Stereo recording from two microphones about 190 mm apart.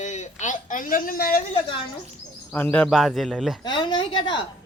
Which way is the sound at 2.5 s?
10° left (ahead or behind).